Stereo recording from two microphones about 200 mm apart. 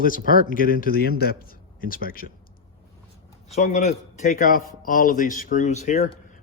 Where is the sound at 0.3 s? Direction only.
45° left (ahead or behind).